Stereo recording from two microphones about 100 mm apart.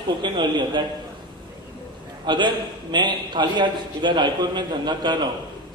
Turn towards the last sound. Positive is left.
turn(degrees=-50)  # may be behind; listen again after turning